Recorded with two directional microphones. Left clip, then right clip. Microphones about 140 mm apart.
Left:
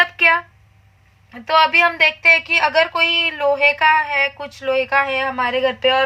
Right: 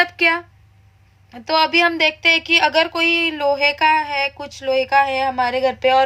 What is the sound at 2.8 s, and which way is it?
A woman's voice, 50° right (ahead or behind).